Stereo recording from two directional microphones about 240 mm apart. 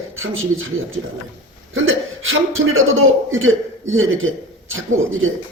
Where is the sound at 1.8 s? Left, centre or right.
Right.